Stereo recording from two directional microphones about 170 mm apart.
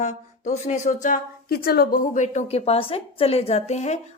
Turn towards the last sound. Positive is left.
turn(degrees=45)  # may be behind; listen again after turning